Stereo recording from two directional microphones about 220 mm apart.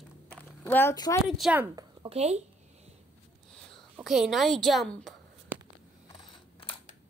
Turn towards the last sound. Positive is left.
turn(degrees=25)  # may be behind; listen again after turning